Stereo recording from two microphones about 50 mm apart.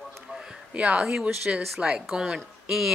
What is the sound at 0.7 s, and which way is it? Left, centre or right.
Speech, right.